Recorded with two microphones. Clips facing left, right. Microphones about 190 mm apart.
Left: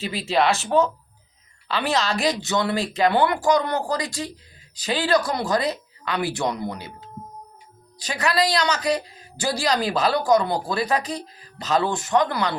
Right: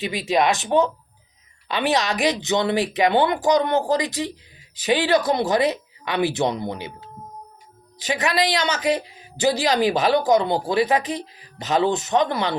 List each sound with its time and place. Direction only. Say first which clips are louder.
0.3 s a woman's voice: right 1 dB; 15° right (ahead or behind)
1.6 s a woman's voice: right 2 dB; 20° right (ahead or behind)
7.9 s a woman's voice: right 1 dB; 20° right (ahead or behind)